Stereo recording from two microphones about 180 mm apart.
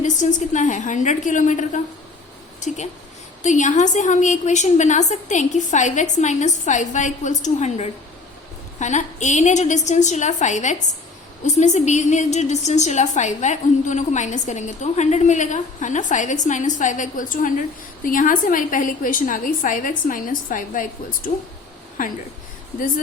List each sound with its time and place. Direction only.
0.0 s a woman's voice: 45° left (ahead or behind)
3.4 s a woman's voice: 40° left (ahead or behind)